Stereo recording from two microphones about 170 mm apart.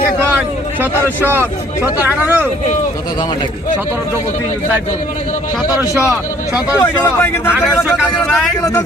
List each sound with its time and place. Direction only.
1.2 s speech: 15° right (ahead or behind)
5.6 s speech: 20° left (ahead or behind)
6.1 s speech: 5° right (ahead or behind)
7.0 s speech: 15° left (ahead or behind)